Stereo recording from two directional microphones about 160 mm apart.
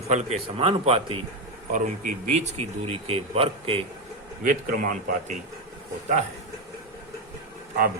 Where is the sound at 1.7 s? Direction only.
50° right (ahead or behind).